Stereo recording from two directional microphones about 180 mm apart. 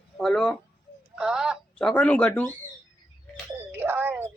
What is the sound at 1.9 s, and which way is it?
Speech, 5° left (ahead or behind).